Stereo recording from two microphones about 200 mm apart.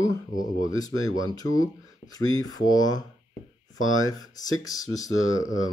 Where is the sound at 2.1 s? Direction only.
20° left (ahead or behind).